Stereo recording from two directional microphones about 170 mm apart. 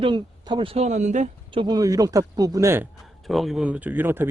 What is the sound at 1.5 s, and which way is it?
Speech, 25° right (ahead or behind).